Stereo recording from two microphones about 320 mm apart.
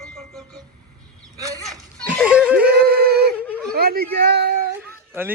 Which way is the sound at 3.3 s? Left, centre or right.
Centre.